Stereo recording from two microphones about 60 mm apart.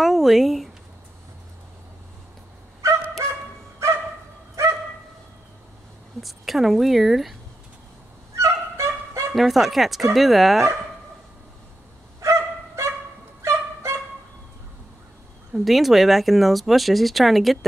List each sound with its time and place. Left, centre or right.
0.0 s a sound: centre
2.8 s dog: right
6.2 s speech: centre
8.4 s dog: right
9.3 s speech: centre
12.2 s dog: right
13.4 s music: right
15.5 s speech: centre